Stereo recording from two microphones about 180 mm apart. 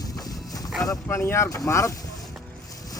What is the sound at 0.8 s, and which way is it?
Speech, 15° left (ahead or behind).